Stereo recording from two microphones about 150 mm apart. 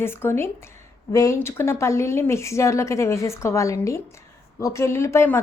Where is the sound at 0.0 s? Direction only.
15° left (ahead or behind).